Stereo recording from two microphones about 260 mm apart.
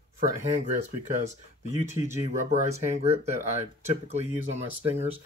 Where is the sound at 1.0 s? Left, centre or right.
Right.